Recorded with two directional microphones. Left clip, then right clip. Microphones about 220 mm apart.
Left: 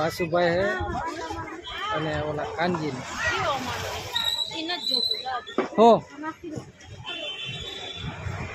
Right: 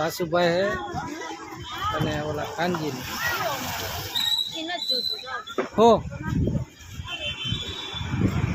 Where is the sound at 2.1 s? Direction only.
Centre (ahead or behind).